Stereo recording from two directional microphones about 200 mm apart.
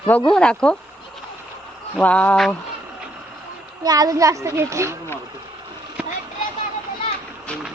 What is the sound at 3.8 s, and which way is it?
A child's voice, 20° right (ahead or behind).